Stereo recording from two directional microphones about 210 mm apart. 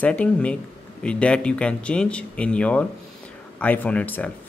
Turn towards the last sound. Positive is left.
turn(degrees=5)  # may be behind; listen again after turning